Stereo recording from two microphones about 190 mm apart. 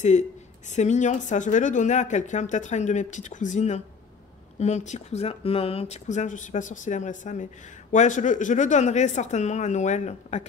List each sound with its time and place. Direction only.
0.0 s a woman's voice: 40° left (ahead or behind)